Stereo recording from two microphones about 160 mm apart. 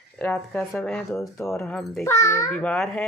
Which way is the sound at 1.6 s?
5° left (ahead or behind).